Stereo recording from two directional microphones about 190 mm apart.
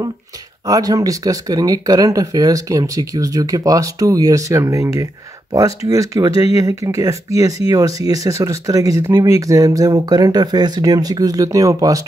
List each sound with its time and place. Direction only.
0.7 s speech: 20° right (ahead or behind)